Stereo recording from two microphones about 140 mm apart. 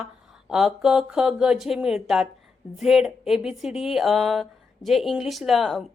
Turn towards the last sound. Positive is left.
turn(degrees=0)  # may be behind; listen again after turning